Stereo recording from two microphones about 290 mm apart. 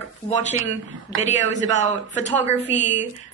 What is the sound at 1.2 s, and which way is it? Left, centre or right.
A man's voice, left.